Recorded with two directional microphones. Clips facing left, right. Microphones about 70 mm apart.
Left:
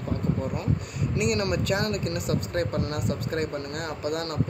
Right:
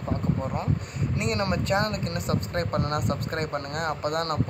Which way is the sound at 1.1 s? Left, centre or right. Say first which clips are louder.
Left 2 dB; right.